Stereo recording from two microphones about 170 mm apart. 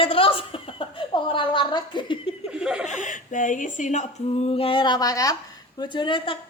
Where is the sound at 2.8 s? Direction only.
45° left (ahead or behind).